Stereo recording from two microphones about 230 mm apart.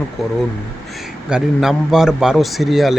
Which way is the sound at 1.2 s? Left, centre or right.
Centre.